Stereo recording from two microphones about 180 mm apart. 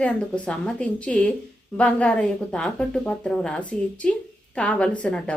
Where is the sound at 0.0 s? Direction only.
5° left (ahead or behind).